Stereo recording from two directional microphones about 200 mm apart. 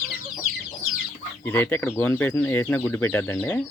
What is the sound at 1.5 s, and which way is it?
Speech, 10° left (ahead or behind).